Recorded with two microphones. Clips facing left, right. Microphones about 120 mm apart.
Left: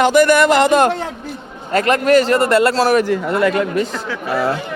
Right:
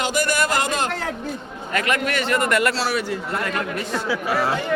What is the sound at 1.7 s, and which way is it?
A man's voice, 35° left (ahead or behind).